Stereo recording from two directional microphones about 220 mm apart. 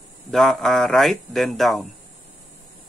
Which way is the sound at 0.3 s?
Centre (ahead or behind).